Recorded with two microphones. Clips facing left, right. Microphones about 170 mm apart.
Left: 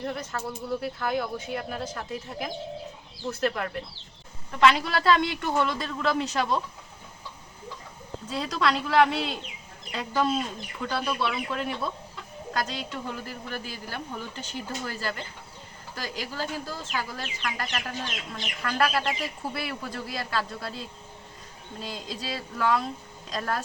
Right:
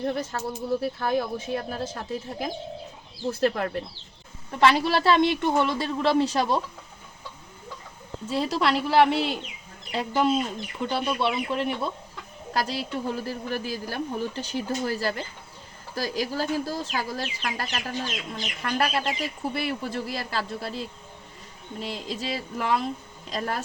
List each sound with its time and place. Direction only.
0.0 s a woman's voice: 30° right (ahead or behind)
8.4 s a woman's voice: 30° right (ahead or behind)
21.8 s speech: 25° right (ahead or behind)